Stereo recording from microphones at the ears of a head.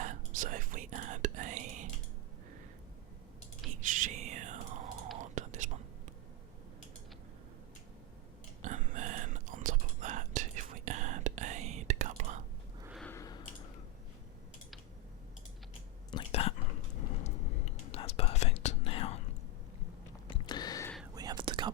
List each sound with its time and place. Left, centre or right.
0.0 s whispering: right
3.7 s whispering: right
8.6 s whispering: right
13.1 s a sound: left
16.1 s whispering: left
20.3 s a sound: left
21.2 s whispering: right